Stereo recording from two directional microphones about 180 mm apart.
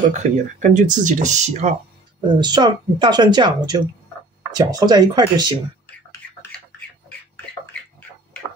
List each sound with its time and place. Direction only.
0.2 s speech: 45° right (ahead or behind)
2.2 s speech: 25° right (ahead or behind)